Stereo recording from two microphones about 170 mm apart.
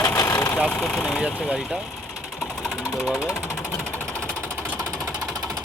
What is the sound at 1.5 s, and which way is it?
Vehicle, 5° right (ahead or behind).